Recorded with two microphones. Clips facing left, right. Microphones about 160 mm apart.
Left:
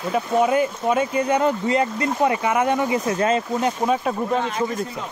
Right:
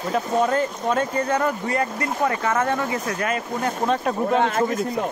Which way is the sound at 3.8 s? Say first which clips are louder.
Even; 5° left (ahead or behind).